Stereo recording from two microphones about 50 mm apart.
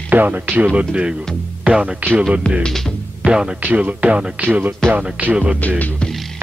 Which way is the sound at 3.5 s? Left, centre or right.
Right.